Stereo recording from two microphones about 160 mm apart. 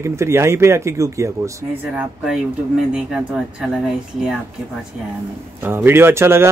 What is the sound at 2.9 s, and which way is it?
Speech, 5° right (ahead or behind).